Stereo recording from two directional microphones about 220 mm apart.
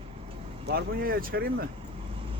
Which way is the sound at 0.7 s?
45° right (ahead or behind).